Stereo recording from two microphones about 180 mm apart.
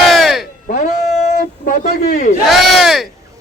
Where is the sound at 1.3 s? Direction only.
50° left (ahead or behind).